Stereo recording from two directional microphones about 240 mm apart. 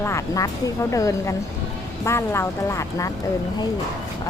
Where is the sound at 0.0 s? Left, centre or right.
Centre.